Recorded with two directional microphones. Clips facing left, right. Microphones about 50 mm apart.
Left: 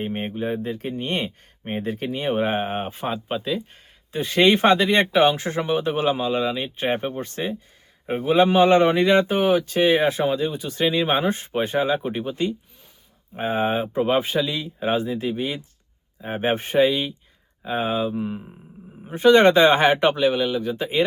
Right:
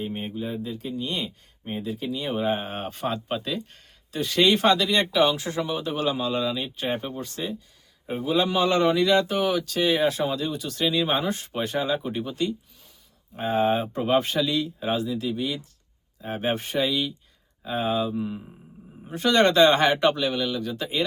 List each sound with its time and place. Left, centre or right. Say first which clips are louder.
0.0 s speech: left 4 dB; left; by 3.6 s centre
4.1 s a man's voice: left 3 dB; left